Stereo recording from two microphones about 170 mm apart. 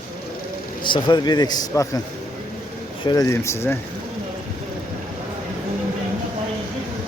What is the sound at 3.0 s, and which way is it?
Speech, 20° left (ahead or behind).